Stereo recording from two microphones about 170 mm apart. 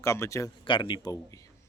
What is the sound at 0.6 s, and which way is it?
Speech, 30° left (ahead or behind).